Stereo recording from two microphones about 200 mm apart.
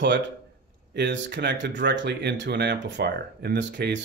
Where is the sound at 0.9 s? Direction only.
60° right (ahead or behind).